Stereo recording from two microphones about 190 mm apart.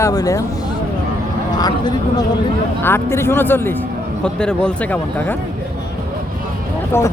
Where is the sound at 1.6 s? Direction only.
20° left (ahead or behind).